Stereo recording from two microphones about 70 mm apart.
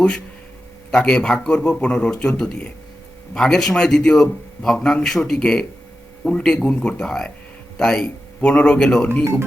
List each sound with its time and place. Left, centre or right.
0.9 s a man's voice: centre